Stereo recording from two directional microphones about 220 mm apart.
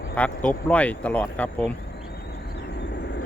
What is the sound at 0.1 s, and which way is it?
Speech, 5° left (ahead or behind).